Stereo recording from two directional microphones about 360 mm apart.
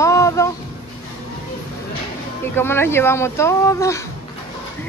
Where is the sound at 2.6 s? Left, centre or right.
Centre.